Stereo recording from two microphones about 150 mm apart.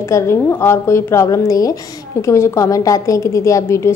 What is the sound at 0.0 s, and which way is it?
A woman's voice, 15° left (ahead or behind).